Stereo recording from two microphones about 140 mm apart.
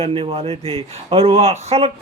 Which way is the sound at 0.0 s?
45° right (ahead or behind).